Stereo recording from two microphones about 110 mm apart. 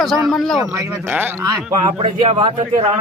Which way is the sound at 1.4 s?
30° right (ahead or behind).